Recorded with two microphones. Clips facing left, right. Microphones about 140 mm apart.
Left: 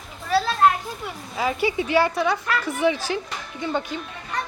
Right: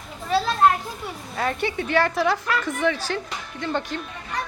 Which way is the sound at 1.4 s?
5° left (ahead or behind).